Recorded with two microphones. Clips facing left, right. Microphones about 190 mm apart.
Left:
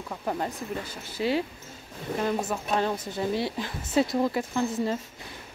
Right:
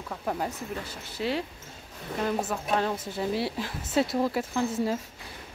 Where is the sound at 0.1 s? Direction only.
5° left (ahead or behind).